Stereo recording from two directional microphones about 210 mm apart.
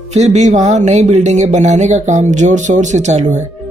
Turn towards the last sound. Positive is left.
turn(degrees=-35)  # may be behind; listen again after turning